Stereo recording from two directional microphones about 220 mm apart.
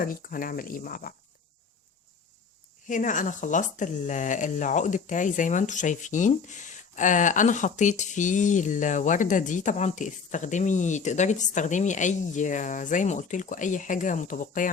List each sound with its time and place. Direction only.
0.0 s speech: 40° left (ahead or behind)
2.8 s speech: 35° left (ahead or behind)